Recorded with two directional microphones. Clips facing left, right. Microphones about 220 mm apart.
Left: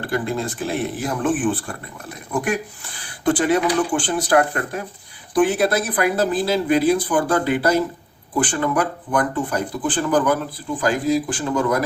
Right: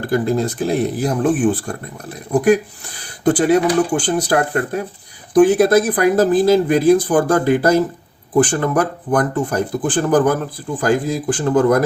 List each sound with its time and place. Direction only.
0.0 s speech: 40° right (ahead or behind)